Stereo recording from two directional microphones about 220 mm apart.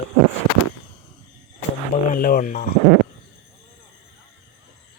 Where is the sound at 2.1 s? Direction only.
40° left (ahead or behind).